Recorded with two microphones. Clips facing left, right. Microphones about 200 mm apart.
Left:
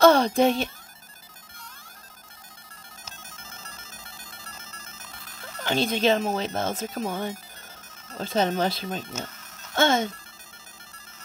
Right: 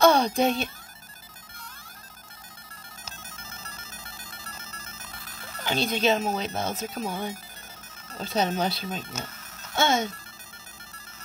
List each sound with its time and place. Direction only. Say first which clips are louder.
0.0 s music: left 3 dB; 55° left (ahead or behind)
3.2 s music: right 1 dB; 5° right (ahead or behind)
5.6 s speech: left 2 dB; 55° left (ahead or behind)
9.1 s music: left 2 dB; 5° right (ahead or behind)
9.8 s speech: left 2 dB; 55° left (ahead or behind)